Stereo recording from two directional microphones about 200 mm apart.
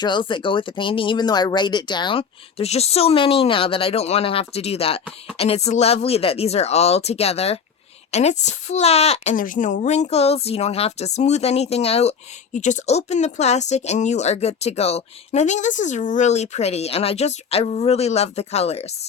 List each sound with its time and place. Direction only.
0.0 s speech: 25° left (ahead or behind)